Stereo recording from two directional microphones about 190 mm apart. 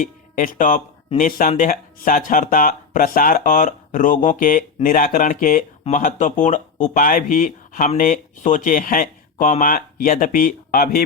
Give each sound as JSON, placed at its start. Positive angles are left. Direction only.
{"t": 0.0, "sound": "speech", "side_deg": 45}